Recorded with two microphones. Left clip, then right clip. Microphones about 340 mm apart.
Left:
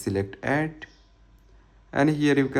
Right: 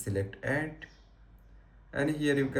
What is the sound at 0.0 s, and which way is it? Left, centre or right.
Speech, centre.